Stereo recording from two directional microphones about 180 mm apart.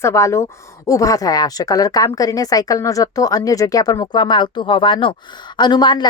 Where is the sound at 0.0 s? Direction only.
15° left (ahead or behind).